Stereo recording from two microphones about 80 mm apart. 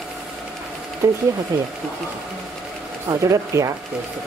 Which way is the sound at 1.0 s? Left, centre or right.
Right.